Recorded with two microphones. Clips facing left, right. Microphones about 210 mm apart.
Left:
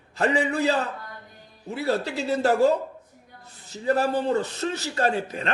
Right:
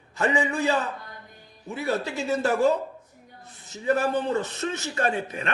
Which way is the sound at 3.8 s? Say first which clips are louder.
Left 1 dB; 35° left (ahead or behind).